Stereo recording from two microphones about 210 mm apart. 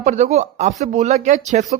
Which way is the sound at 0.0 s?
35° right (ahead or behind).